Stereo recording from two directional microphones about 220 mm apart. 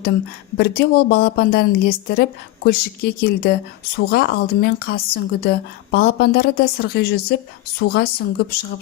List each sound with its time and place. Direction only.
0.5 s speech: 45° left (ahead or behind)